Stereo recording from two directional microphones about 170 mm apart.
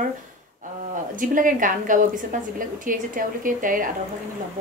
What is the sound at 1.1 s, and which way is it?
A woman's voice, 50° right (ahead or behind).